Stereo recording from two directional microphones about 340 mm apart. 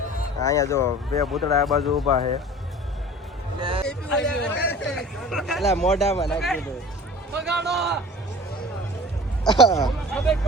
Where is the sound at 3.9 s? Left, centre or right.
Centre.